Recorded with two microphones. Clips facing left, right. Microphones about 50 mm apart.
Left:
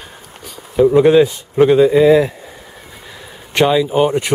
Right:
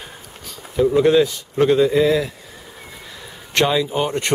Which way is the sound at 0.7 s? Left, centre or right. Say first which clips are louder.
Left 5 dB; centre.